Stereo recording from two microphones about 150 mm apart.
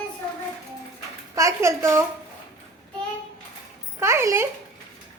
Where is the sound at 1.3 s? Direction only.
20° right (ahead or behind).